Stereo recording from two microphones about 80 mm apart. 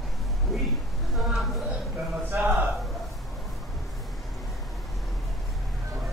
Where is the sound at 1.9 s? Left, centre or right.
Right.